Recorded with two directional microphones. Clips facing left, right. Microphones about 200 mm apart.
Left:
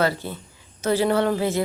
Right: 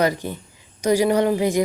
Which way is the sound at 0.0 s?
15° right (ahead or behind).